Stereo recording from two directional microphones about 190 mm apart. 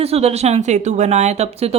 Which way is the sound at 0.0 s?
35° right (ahead or behind).